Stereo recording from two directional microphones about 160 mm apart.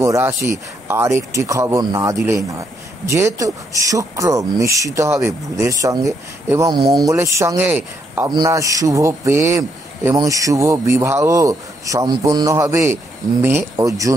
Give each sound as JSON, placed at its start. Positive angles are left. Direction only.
{"t": 0.0, "sound": "a man's voice", "side_deg": -20}